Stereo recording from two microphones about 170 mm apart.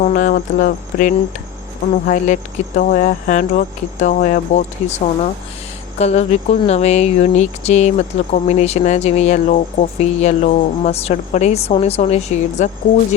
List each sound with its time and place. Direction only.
0.0 s speech: 50° left (ahead or behind)